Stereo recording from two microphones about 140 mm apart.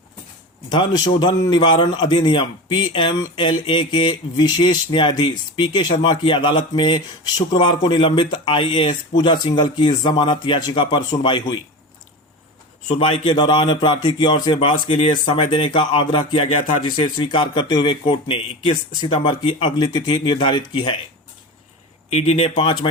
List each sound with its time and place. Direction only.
0.7 s speech: 30° left (ahead or behind)
12.9 s speech: 40° left (ahead or behind)
22.1 s speech: 45° left (ahead or behind)